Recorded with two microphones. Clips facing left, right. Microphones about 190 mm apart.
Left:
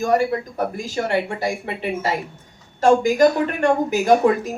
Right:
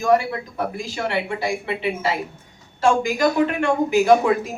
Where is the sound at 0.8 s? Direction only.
45° left (ahead or behind).